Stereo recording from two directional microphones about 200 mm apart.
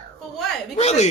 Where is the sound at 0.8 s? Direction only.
35° left (ahead or behind).